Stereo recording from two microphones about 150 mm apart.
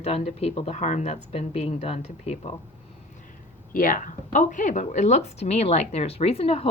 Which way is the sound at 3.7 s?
65° left (ahead or behind).